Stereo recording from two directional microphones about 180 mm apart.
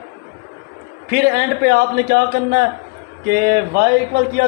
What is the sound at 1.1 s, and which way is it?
A man's voice, 60° right (ahead or behind).